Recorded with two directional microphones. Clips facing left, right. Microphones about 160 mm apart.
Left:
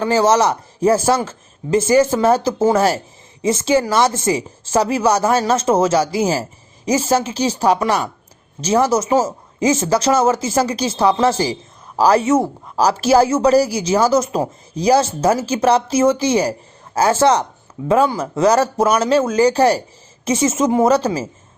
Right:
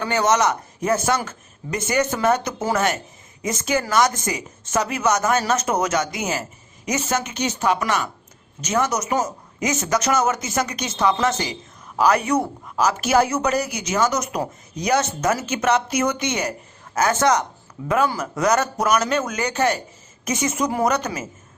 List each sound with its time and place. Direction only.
0.0 s speech: 30° left (ahead or behind)